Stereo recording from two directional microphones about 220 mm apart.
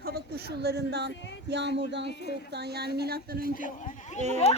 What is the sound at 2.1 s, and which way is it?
Speech, 50° left (ahead or behind).